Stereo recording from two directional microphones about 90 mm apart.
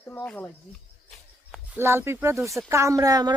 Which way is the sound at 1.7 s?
25° right (ahead or behind).